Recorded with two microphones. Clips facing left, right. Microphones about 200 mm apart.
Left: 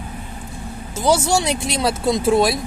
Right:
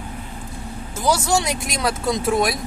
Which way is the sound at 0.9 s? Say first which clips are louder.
Left 2 dB; 25° left (ahead or behind).